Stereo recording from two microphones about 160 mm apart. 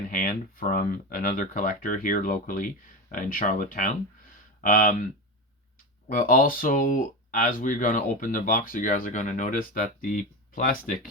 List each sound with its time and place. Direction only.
0.1 s speech: 60° left (ahead or behind)
6.1 s speech: 60° left (ahead or behind)